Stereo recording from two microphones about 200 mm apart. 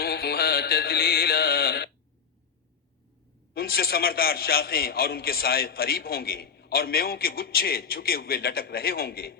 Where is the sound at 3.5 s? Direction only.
50° left (ahead or behind).